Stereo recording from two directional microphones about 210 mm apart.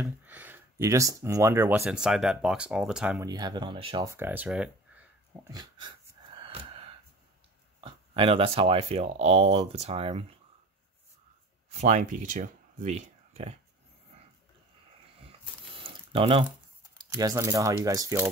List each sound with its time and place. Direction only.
0.0 s speech: 10° right (ahead or behind)
3.3 s speech: 20° right (ahead or behind)
5.5 s a sound: 20° right (ahead or behind)
7.8 s speech: 25° right (ahead or behind)
11.7 s speech: 35° right (ahead or behind)
15.7 s a sound: 25° right (ahead or behind)
17.1 s speech: 15° right (ahead or behind)